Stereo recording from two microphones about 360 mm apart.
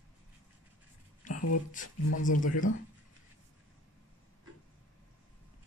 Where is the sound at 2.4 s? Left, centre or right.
Left.